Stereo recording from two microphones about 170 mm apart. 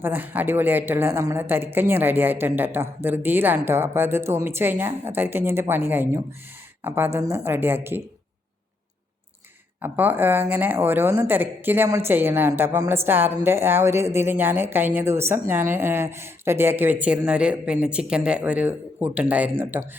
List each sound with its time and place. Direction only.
0.0 s speech: 10° right (ahead or behind)
9.8 s speech: 10° right (ahead or behind)